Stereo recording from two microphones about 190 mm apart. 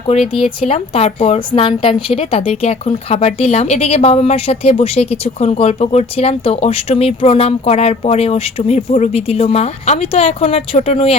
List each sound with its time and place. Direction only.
0.3 s speech: 30° left (ahead or behind)